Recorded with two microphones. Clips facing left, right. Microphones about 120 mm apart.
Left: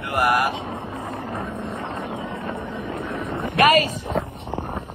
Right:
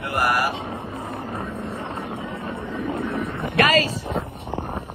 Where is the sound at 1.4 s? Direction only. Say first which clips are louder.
Left 1 dB; 20° left (ahead or behind).